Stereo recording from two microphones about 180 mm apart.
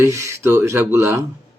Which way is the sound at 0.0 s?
15° right (ahead or behind).